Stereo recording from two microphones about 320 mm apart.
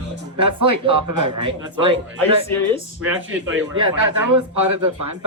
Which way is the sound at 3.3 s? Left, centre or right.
Right.